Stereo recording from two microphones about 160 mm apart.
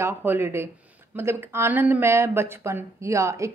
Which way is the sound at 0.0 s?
15° right (ahead or behind).